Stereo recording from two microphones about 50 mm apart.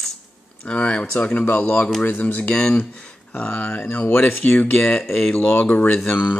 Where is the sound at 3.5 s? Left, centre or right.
Left.